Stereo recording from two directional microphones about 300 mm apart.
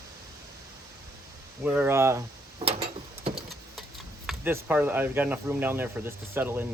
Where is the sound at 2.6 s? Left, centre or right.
Centre.